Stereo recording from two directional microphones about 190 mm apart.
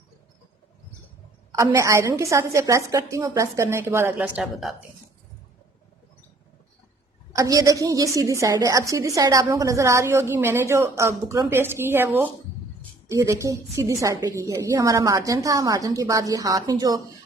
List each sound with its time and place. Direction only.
1.5 s a woman's voice: 15° right (ahead or behind)
7.3 s a woman's voice: 15° right (ahead or behind)